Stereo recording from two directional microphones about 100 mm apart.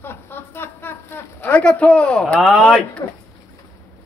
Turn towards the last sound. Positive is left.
turn(degrees=40)  # may be behind; listen again after turning